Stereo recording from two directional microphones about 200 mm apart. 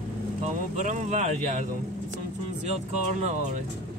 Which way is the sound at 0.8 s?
40° right (ahead or behind).